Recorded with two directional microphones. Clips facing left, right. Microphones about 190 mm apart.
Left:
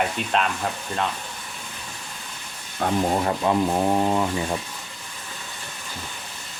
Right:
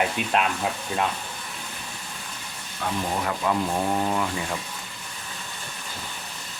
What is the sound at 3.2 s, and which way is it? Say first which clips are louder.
Speech: left 4 dB; 25° left (ahead or behind).